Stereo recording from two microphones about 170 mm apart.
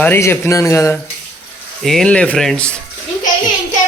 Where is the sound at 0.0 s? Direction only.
15° left (ahead or behind).